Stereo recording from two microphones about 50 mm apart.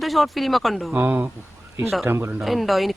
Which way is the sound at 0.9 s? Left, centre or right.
Right.